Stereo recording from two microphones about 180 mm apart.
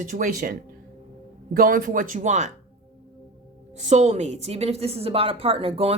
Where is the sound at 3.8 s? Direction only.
40° right (ahead or behind).